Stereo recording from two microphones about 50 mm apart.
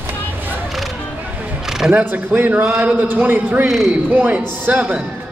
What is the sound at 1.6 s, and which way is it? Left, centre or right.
Camera, centre.